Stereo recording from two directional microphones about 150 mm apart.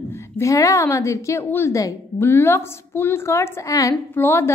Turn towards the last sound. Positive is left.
turn(degrees=15)  # may be behind; listen again after turning